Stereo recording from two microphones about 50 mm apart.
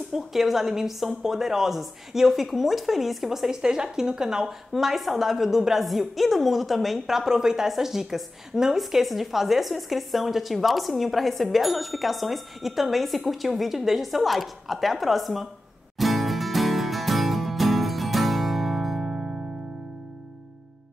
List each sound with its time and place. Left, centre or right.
0.1 s a woman's voice: centre
16.0 s music: centre
19.0 s music: centre